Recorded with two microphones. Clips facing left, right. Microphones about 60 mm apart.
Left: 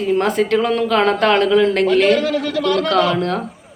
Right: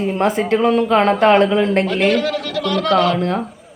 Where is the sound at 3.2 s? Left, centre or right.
Right.